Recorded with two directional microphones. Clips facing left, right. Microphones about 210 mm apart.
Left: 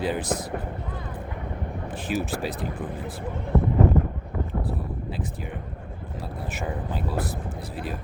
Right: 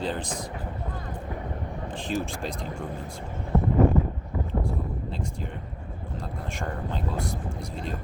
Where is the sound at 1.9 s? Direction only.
5° left (ahead or behind).